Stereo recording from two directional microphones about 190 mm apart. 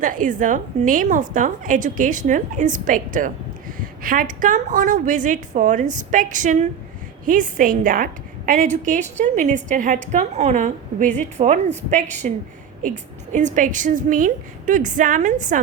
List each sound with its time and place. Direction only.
0.0 s a woman's voice: 45° right (ahead or behind)